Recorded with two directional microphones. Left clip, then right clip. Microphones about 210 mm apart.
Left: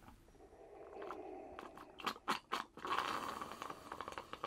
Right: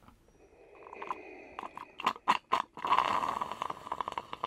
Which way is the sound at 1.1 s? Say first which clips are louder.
Right 4 dB; 20° right (ahead or behind).